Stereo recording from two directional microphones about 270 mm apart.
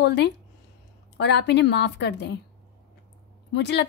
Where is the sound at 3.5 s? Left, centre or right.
Left.